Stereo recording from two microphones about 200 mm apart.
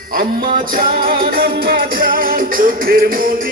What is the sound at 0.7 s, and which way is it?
Music, 45° right (ahead or behind).